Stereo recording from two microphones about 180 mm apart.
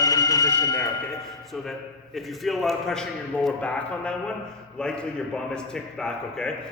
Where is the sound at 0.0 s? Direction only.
20° left (ahead or behind).